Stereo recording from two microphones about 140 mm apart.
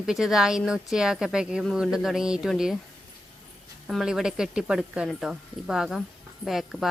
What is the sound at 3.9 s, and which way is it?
A woman's voice, centre (ahead or behind).